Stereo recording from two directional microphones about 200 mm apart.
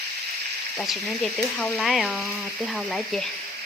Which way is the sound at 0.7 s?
Centre (ahead or behind).